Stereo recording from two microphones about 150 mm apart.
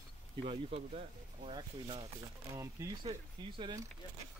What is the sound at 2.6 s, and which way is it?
Speech, 20° right (ahead or behind).